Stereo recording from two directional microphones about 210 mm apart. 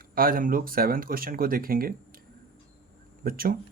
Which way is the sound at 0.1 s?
45° right (ahead or behind).